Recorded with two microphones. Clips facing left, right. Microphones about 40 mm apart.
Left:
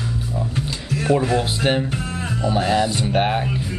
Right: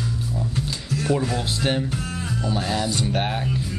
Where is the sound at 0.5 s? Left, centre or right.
Left.